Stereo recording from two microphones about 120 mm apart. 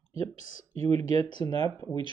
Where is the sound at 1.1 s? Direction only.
35° left (ahead or behind).